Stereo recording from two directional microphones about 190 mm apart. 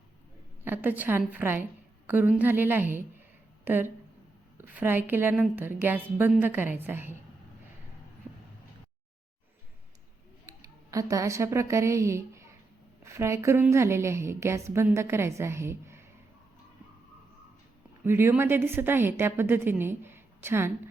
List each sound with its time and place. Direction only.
0.6 s a woman's voice: 10° right (ahead or behind)
10.9 s a woman's voice: 15° right (ahead or behind)
18.0 s a woman's voice: 10° right (ahead or behind)